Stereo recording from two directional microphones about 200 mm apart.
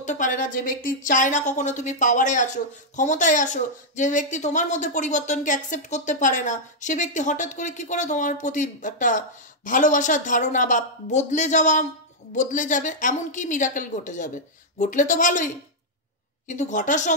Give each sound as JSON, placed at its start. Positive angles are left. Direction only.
{"t": 0.0, "sound": "speech", "side_deg": 40}